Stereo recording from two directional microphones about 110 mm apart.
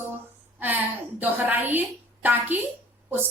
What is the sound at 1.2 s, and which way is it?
Speech, 15° right (ahead or behind).